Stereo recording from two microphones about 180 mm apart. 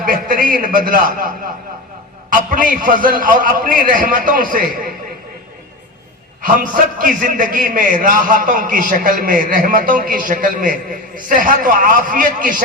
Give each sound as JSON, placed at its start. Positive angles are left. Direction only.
{"t": 0.0, "sound": "a sound", "side_deg": -50}
{"t": 2.3, "sound": "a man's voice", "side_deg": -50}
{"t": 6.4, "sound": "a man's voice", "side_deg": -50}